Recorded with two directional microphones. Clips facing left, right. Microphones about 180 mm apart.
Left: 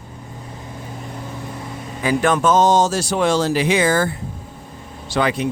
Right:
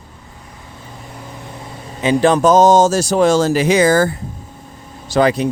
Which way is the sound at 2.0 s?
20° right (ahead or behind).